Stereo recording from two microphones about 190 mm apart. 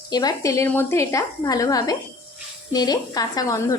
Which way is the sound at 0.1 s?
20° left (ahead or behind).